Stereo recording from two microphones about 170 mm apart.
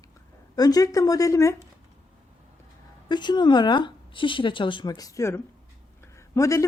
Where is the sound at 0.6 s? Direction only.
20° left (ahead or behind).